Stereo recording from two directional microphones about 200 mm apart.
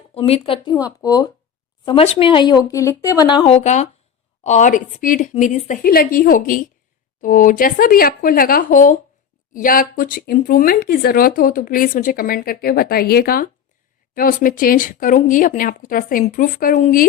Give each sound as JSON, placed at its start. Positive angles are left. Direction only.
{"t": 0.1, "sound": "a woman's voice", "side_deg": 30}